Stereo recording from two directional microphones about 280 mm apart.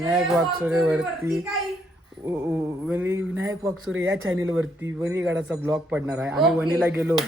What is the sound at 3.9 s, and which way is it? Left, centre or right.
Speech, right.